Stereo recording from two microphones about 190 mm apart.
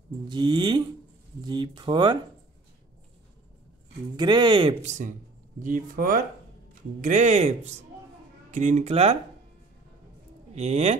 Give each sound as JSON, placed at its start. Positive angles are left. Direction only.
{"t": 0.3, "sound": "speech", "side_deg": -25}
{"t": 4.2, "sound": "speech", "side_deg": -25}
{"t": 10.5, "sound": "speech", "side_deg": -35}